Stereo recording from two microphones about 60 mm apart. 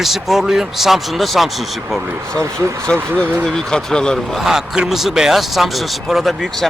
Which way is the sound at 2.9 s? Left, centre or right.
Centre.